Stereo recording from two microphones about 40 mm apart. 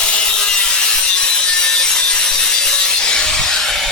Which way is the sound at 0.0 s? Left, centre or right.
Left.